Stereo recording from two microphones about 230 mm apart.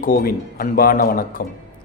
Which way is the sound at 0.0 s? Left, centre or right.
Left.